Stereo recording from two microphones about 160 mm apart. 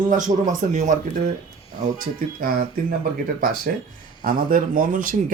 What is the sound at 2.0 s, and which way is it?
Speech, 60° right (ahead or behind).